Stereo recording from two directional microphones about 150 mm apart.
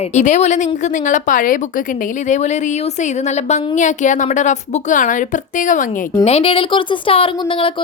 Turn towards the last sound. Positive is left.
turn(degrees=35)  # may be behind; listen again after turning